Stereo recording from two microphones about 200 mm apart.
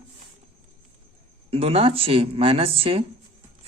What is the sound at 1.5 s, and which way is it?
Speech, 30° right (ahead or behind).